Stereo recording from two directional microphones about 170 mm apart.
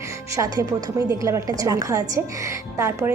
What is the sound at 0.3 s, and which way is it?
A woman's voice, 20° right (ahead or behind).